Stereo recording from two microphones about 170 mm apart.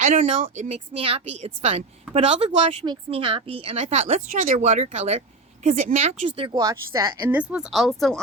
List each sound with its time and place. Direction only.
0.0 s a woman's voice: 45° right (ahead or behind)
6.6 s speech: 20° right (ahead or behind)
7.3 s speech: 5° right (ahead or behind)